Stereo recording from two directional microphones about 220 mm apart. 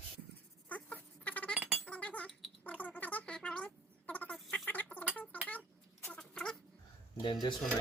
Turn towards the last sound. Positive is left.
turn(degrees=20)  # may be behind; listen again after turning